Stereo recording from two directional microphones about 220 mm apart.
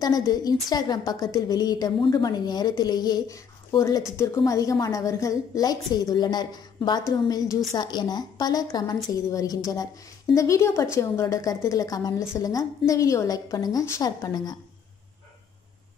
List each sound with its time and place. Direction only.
0.0 s a woman's voice: 15° left (ahead or behind)